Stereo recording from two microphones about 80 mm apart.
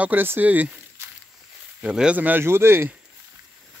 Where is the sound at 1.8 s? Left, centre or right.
Centre; by 2.9 s right.